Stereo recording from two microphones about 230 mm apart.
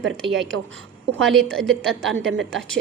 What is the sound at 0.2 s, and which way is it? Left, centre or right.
A woman's voice, centre.